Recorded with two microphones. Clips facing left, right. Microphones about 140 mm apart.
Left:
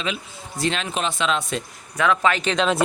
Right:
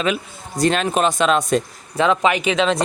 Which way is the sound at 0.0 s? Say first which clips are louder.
Right 7 dB; 50° right (ahead or behind).